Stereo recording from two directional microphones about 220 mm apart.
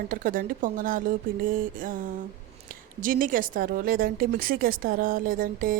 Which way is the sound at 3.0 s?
40° right (ahead or behind).